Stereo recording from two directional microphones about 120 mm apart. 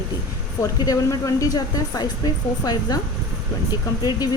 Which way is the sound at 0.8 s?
30° left (ahead or behind).